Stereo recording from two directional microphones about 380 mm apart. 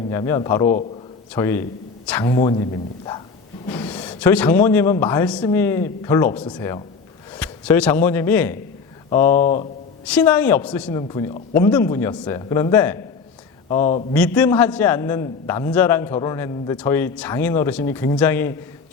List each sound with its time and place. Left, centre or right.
0.1 s speech: centre
3.7 s a man's voice: centre
9.4 s speech: centre
10.1 s a man's voice: centre